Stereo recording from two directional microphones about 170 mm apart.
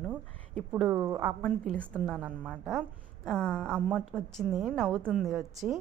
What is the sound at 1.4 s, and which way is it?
A woman's voice, 5° left (ahead or behind).